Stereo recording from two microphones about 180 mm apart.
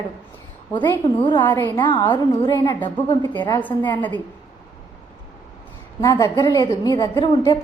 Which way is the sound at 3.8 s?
25° left (ahead or behind).